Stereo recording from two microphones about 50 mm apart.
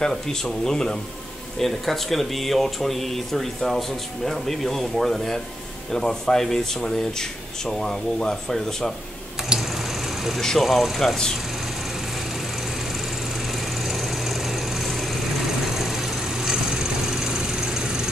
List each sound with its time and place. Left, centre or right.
0.0 s speech: centre
9.5 s sewing machine: centre
10.6 s speech: centre
13.8 s a sound: centre
15.6 s vehicle: centre